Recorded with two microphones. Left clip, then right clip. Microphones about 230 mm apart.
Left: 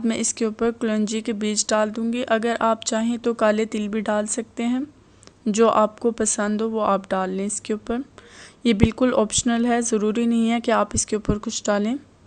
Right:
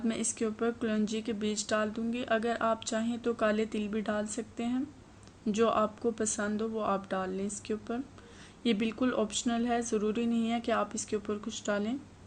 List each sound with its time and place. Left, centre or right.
0.0 s speech: left